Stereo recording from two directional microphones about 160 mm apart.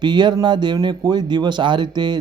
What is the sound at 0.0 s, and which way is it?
Speech, 25° right (ahead or behind).